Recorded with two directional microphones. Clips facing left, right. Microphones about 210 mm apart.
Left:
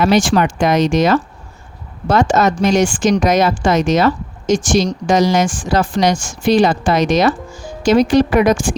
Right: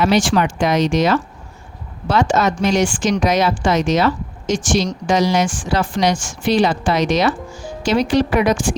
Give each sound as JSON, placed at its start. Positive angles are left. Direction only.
{"t": 0.0, "sound": "speech", "side_deg": 45}